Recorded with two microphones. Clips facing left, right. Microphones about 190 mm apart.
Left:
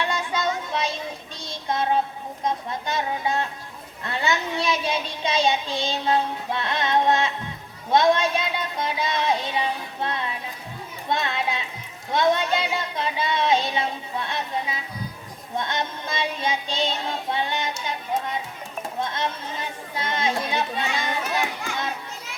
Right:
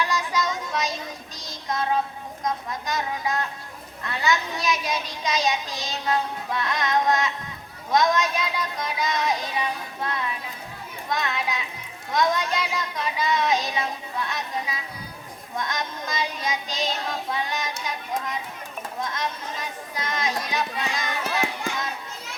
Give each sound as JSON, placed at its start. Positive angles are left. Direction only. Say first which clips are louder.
{"t": 0.0, "sound": "child singing", "louder": "even", "side_deg": 30}
{"t": 2.4, "sound": "speech", "louder": "left 2 dB", "side_deg": 25}